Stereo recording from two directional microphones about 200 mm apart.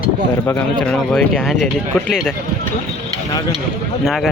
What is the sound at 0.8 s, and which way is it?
Speech, 5° left (ahead or behind).